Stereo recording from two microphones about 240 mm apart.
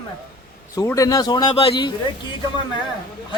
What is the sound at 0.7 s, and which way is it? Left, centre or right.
Speech, centre.